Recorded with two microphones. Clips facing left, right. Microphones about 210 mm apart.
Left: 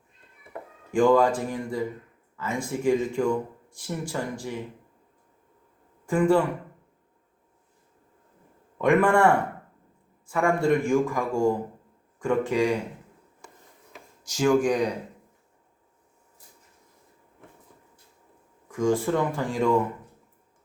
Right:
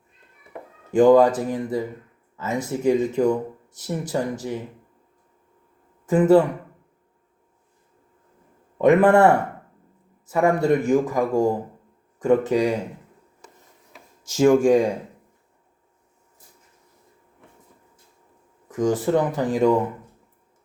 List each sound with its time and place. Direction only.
0.9 s speech: 20° right (ahead or behind)
6.1 s speech: 20° right (ahead or behind)
8.8 s a man's voice: 20° right (ahead or behind)
14.3 s speech: 25° right (ahead or behind)
18.7 s speech: 20° right (ahead or behind)